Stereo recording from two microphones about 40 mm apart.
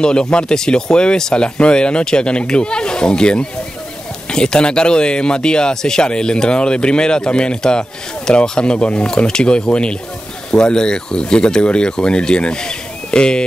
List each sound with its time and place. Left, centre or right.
0.0 s speech: left